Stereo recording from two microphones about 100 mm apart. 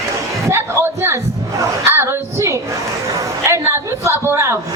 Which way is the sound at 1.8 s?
25° right (ahead or behind).